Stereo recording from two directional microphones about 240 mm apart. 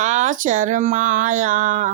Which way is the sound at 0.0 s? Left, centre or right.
Right.